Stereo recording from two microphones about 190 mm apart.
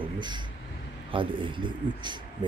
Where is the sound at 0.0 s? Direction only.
25° right (ahead or behind).